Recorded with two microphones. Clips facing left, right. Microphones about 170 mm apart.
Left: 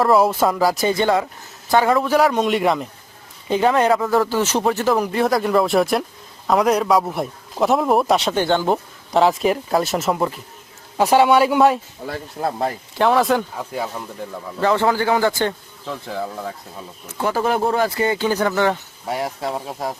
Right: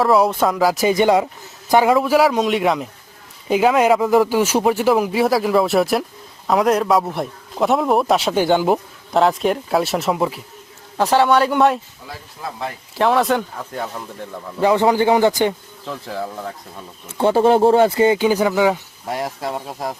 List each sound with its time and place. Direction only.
0.0 s a man's voice: centre (ahead or behind)
10.9 s speech: 10° left (ahead or behind)
12.0 s speech: 60° left (ahead or behind)
13.0 s a man's voice: centre (ahead or behind)
14.6 s speech: 15° right (ahead or behind)
15.9 s a man's voice: centre (ahead or behind)
17.1 s speech: 25° right (ahead or behind); by 20.0 s centre (ahead or behind)